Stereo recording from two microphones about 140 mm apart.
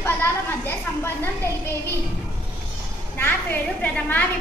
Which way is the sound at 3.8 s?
10° left (ahead or behind).